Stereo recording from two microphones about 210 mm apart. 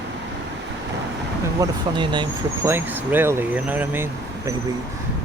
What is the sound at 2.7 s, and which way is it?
Speech, 10° right (ahead or behind).